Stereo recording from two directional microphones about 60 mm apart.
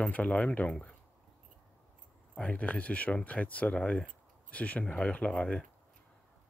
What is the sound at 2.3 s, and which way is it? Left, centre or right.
Speech, left.